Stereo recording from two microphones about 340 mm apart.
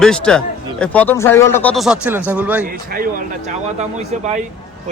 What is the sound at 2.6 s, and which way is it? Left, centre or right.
A man's voice, right.